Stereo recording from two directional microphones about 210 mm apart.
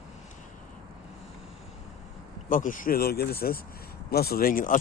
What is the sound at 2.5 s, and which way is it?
Speech, 40° left (ahead or behind).